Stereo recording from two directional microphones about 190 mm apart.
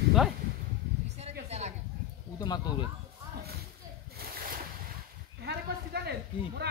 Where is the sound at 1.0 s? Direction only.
35° right (ahead or behind).